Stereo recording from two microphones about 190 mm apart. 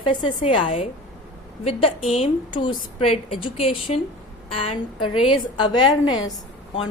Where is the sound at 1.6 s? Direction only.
30° left (ahead or behind).